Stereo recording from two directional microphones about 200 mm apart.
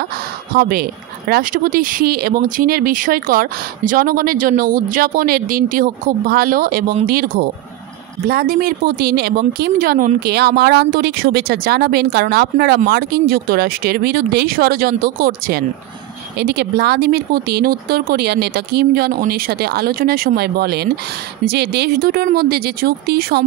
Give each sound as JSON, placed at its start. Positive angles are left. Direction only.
{"t": 0.6, "sound": "speech", "side_deg": -50}